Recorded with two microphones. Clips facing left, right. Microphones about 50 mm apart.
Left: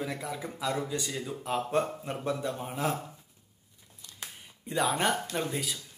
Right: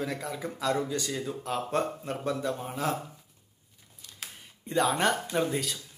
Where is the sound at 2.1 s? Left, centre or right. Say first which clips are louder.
Right 1 dB; centre.